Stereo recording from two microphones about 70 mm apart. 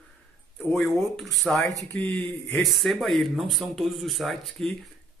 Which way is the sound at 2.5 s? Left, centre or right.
Centre.